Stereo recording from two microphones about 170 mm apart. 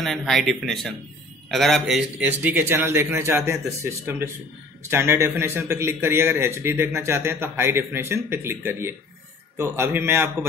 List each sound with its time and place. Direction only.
0.0 s a man's voice: centre (ahead or behind)